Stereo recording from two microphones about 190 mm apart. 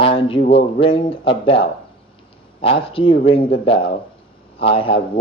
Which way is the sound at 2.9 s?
30° left (ahead or behind).